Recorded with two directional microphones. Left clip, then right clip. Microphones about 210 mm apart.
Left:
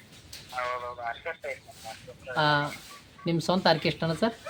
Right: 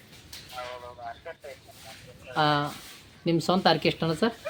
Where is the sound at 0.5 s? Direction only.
25° left (ahead or behind).